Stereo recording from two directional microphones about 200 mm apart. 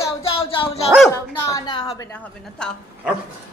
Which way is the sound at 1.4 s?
20° left (ahead or behind).